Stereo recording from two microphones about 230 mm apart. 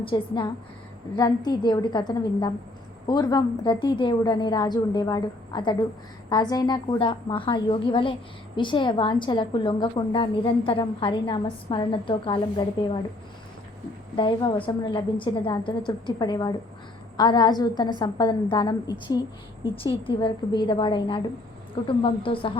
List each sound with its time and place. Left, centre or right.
0.0 s a woman's voice: left
14.2 s a woman's voice: left